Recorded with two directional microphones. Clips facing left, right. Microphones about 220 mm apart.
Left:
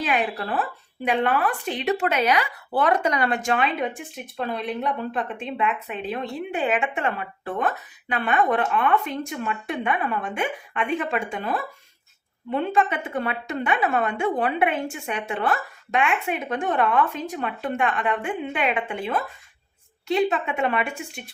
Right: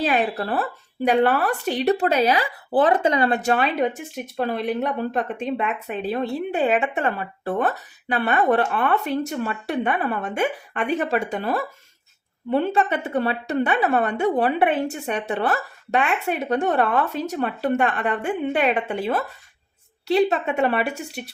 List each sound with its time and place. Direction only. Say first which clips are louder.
0.0 s a woman's voice: right 3 dB; 35° right (ahead or behind)